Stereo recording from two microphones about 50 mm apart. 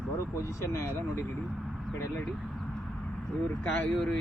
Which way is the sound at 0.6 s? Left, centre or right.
Left.